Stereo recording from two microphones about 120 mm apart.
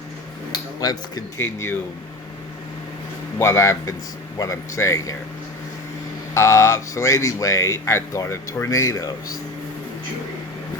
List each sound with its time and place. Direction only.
0.5 s a sound: 35° left (ahead or behind)
1.4 s speech: 20° left (ahead or behind)
3.3 s speech: 20° left (ahead or behind)
6.3 s speech: 25° left (ahead or behind)